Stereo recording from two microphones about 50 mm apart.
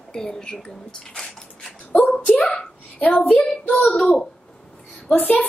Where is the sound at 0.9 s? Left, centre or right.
Centre.